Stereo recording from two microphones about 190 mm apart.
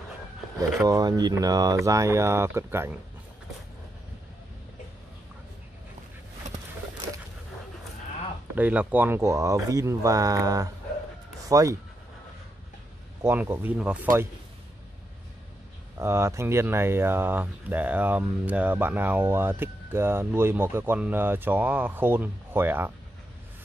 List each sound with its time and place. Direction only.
0.6 s speech: 20° right (ahead or behind)
8.5 s speech: 10° right (ahead or behind)
13.2 s speech: 10° right (ahead or behind)
16.0 s speech: 15° right (ahead or behind)